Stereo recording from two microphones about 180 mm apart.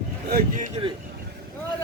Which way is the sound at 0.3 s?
50° right (ahead or behind).